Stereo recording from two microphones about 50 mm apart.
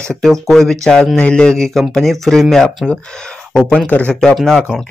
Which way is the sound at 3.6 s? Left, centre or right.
Left.